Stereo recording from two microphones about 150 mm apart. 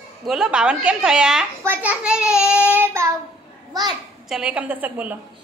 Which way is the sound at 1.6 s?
10° right (ahead or behind).